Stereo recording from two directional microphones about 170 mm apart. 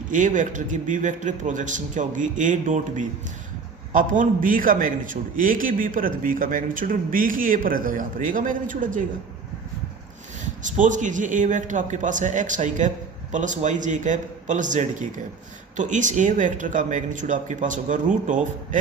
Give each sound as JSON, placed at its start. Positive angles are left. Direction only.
{"t": 0.1, "sound": "a man's voice", "side_deg": -50}
{"t": 10.6, "sound": "a man's voice", "side_deg": -45}